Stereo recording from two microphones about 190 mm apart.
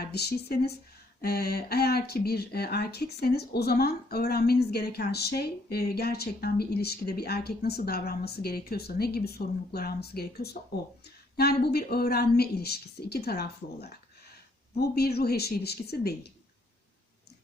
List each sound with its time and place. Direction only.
0.1 s speech: 55° left (ahead or behind)